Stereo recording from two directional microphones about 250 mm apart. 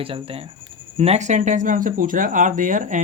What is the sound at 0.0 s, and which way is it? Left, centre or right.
Speech, right.